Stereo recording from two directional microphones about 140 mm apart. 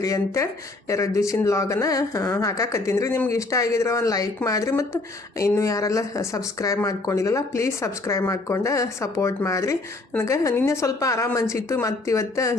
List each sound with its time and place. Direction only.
0.0 s speech: 25° left (ahead or behind)